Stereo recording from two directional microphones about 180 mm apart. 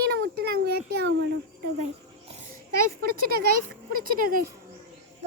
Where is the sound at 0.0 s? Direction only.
60° right (ahead or behind).